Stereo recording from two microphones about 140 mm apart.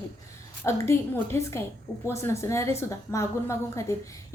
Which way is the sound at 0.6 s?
20° left (ahead or behind).